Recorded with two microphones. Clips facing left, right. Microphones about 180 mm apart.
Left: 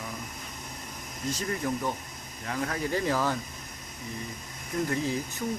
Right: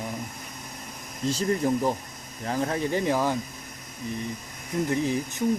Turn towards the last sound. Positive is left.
turn(degrees=-20)  # may be behind; listen again after turning